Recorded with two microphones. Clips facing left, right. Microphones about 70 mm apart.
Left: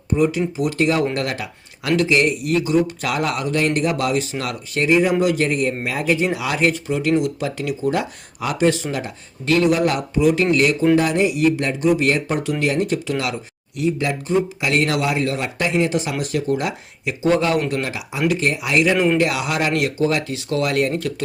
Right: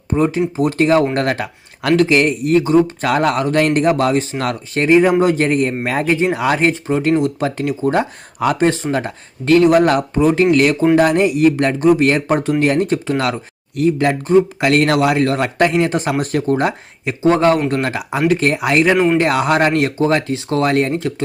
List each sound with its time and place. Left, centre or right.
0.1 s a man's voice: right
17.8 s a man's voice: right